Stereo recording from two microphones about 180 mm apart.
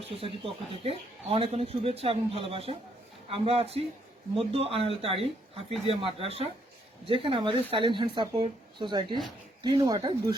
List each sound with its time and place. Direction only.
0.4 s speech: 30° right (ahead or behind)